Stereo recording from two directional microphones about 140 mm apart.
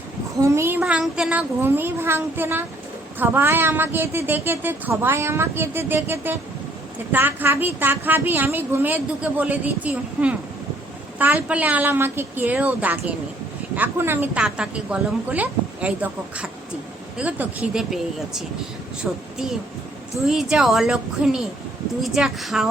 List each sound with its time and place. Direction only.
0.4 s a woman's voice: 20° right (ahead or behind)
20.2 s speech: 5° right (ahead or behind)